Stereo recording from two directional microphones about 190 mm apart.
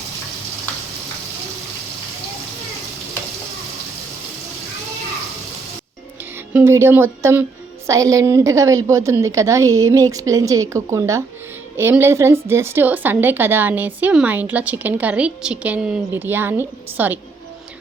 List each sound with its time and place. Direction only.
6.5 s a woman's voice: 10° right (ahead or behind)